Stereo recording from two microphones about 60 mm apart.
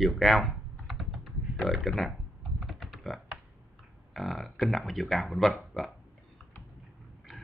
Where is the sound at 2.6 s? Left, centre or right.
Centre.